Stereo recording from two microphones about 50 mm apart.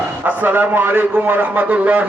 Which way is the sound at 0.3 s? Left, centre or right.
Right.